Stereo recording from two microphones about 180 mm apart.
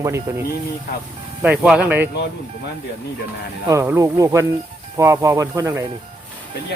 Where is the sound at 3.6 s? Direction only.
15° right (ahead or behind).